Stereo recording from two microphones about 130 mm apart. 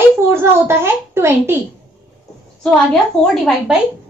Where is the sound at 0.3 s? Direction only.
20° right (ahead or behind).